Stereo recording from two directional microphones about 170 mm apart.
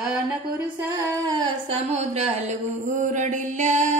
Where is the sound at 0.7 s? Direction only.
15° right (ahead or behind).